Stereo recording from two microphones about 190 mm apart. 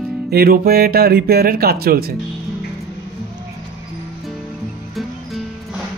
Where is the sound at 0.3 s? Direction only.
55° right (ahead or behind).